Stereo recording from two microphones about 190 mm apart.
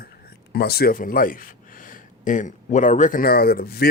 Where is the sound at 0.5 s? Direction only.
55° left (ahead or behind).